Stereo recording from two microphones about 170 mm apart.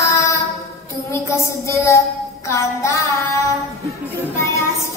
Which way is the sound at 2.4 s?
15° left (ahead or behind).